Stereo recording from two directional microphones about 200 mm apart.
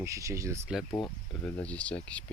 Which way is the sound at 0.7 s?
Centre (ahead or behind).